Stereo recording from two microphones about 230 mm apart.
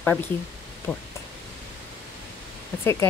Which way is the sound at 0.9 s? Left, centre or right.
Centre.